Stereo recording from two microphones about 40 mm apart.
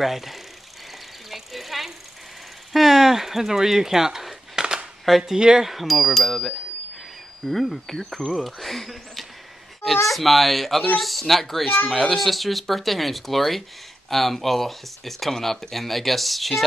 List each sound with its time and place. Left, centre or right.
0.0 s speech: centre
1.3 s a sound: centre
2.7 s speech: centre
4.6 s a sound: centre
5.2 s speech: centre
5.7 s speech: centre
7.8 s speech: centre